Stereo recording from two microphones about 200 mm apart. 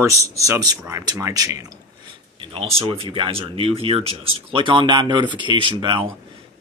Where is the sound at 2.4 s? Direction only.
30° right (ahead or behind).